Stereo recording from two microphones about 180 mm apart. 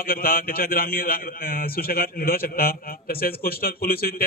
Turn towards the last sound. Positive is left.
turn(degrees=55)  # may be behind; listen again after turning